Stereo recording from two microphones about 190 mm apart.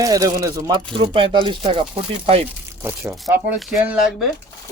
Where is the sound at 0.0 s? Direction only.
20° right (ahead or behind).